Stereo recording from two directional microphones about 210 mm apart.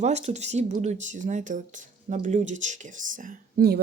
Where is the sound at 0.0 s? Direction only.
30° right (ahead or behind).